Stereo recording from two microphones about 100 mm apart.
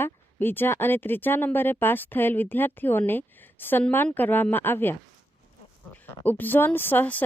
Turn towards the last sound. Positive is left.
turn(degrees=15)  # may be behind; listen again after turning